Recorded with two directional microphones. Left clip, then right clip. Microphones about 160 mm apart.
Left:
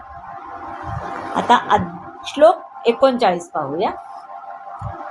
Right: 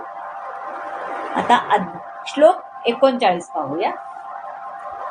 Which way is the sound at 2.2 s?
40° left (ahead or behind).